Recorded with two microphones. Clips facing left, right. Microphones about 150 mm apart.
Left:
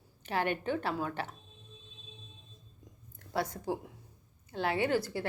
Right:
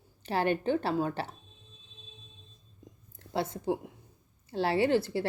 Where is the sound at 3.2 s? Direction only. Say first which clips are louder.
Right 2 dB; 25° right (ahead or behind).